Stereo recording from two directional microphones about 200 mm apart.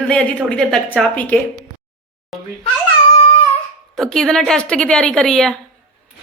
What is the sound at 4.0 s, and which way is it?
Speech, centre (ahead or behind).